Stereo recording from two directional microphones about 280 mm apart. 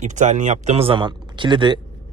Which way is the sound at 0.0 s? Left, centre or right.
Right.